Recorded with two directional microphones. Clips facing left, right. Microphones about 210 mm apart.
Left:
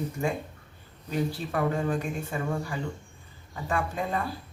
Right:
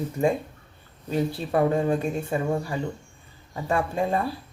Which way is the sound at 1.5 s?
25° right (ahead or behind).